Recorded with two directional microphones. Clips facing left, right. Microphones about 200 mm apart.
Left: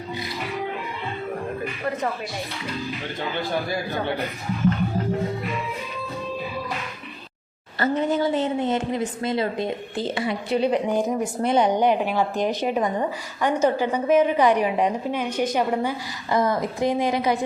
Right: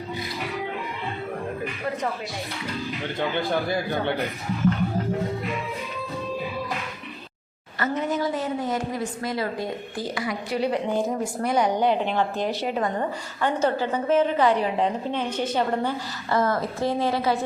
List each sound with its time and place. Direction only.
7.8 s a woman's voice: 30° left (ahead or behind)